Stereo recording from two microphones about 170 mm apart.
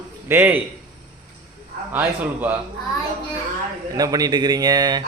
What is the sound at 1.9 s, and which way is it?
Speech, 10° right (ahead or behind).